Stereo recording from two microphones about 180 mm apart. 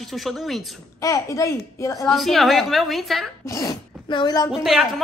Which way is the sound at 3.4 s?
20° left (ahead or behind).